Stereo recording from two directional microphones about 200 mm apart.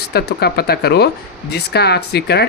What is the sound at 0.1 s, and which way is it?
Speech, 55° left (ahead or behind).